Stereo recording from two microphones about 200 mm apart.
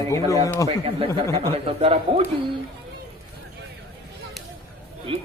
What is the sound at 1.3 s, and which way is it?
Speech, 15° left (ahead or behind).